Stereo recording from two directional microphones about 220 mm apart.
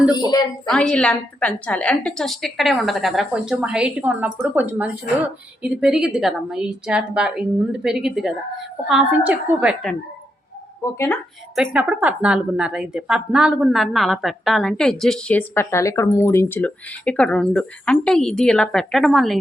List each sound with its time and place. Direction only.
0.2 s a woman's voice: 20° left (ahead or behind)
0.6 s speech: 5° left (ahead or behind)
10.9 s a woman's voice: 10° left (ahead or behind)
11.5 s speech: 5° right (ahead or behind)